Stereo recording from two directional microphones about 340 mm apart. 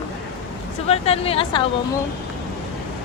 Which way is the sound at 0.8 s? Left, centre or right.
Centre.